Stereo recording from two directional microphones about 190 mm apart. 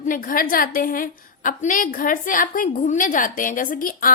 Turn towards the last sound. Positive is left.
turn(degrees=45)  # may be behind; listen again after turning